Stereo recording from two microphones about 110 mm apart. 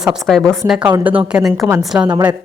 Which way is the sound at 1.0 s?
15° right (ahead or behind).